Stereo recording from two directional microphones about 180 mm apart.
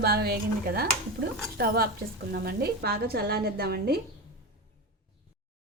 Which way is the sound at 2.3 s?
60° right (ahead or behind).